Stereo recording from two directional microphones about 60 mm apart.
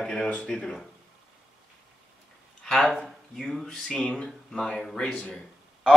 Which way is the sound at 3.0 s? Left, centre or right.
Centre.